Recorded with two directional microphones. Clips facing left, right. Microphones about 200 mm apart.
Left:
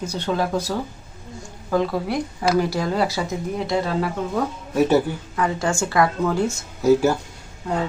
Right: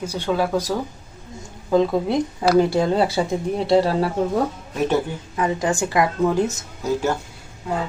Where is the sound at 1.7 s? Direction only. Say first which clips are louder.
Right 4 dB; 20° right (ahead or behind).